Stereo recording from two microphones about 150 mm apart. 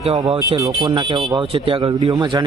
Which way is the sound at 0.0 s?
35° right (ahead or behind).